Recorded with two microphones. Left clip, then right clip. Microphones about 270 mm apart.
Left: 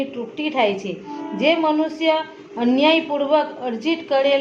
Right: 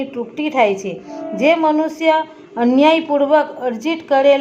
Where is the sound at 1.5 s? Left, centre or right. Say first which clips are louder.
Right 4 dB; right.